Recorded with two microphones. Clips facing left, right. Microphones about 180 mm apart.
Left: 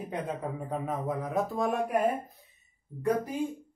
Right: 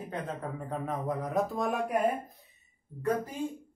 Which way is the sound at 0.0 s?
10° left (ahead or behind).